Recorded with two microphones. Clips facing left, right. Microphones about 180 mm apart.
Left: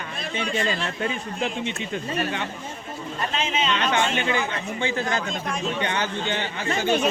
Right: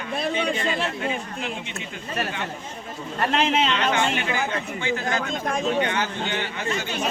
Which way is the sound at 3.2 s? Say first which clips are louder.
Right 6 dB; 65° right (ahead or behind).